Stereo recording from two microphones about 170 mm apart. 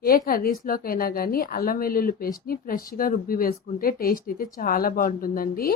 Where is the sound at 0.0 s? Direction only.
60° left (ahead or behind).